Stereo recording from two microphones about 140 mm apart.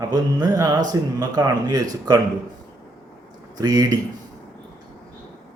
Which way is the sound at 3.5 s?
30° right (ahead or behind).